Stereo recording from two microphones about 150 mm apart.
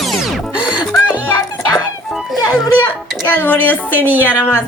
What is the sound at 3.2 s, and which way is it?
Speech, 10° left (ahead or behind).